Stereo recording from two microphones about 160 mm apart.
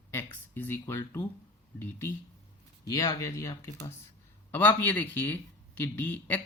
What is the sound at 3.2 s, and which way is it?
Speech, 20° left (ahead or behind).